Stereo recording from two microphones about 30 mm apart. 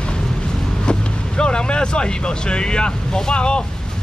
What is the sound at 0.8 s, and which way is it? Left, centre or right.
Vehicle, left.